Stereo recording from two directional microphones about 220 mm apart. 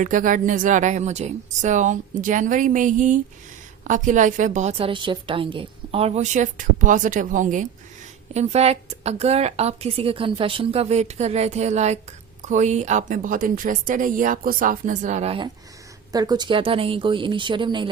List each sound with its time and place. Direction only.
0.0 s a woman's voice: 35° right (ahead or behind)
16.1 s a woman's voice: 20° right (ahead or behind)